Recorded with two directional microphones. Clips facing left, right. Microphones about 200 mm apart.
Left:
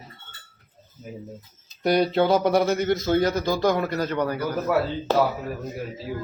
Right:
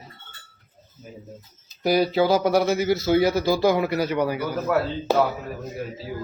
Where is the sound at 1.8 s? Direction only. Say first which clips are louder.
Even; 5° right (ahead or behind).